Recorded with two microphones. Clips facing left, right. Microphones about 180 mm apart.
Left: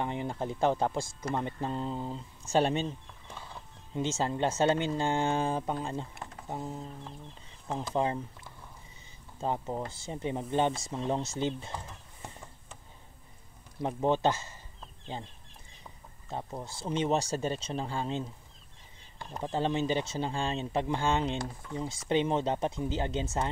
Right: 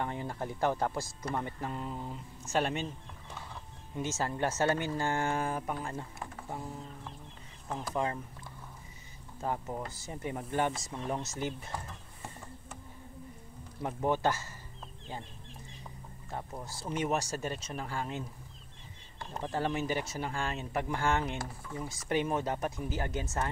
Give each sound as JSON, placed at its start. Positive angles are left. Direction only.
{"t": 0.0, "sound": "speech", "side_deg": 20}
{"t": 3.9, "sound": "speech", "side_deg": 25}
{"t": 9.4, "sound": "speech", "side_deg": 25}
{"t": 13.8, "sound": "speech", "side_deg": 20}
{"t": 16.3, "sound": "speech", "side_deg": 20}
{"t": 19.4, "sound": "speech", "side_deg": 20}